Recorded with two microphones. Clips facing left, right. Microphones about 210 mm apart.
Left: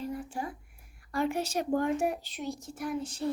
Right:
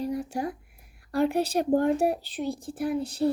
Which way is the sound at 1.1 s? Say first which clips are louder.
Right 6 dB; 35° right (ahead or behind).